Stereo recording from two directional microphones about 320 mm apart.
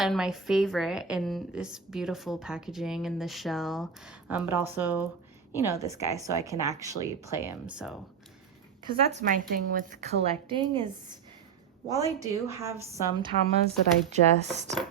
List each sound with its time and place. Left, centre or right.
0.0 s a woman's voice: centre
8.8 s a woman's voice: right
11.9 s a woman's voice: centre